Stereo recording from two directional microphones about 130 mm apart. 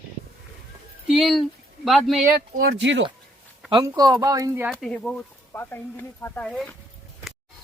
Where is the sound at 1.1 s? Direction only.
Centre (ahead or behind).